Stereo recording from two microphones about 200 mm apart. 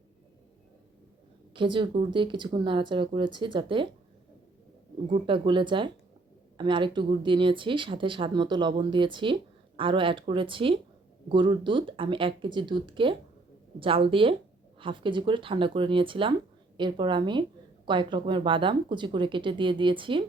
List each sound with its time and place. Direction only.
1.5 s speech: 25° right (ahead or behind)
5.0 s speech: 25° right (ahead or behind)